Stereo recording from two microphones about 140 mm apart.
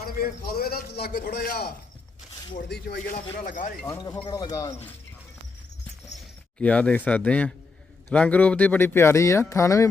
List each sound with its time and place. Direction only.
0.2 s a man's voice: 90° left
3.3 s speech: 70° left (ahead or behind)
4.3 s speech: 30° left (ahead or behind)
6.6 s speech: 10° left (ahead or behind)